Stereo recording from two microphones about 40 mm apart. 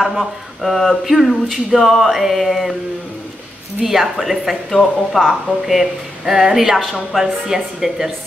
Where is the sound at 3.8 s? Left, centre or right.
Centre.